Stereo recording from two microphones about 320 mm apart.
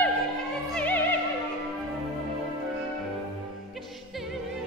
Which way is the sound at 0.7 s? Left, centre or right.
Centre.